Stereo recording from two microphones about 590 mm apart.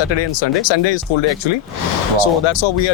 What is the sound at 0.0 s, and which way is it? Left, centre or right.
Speech, left.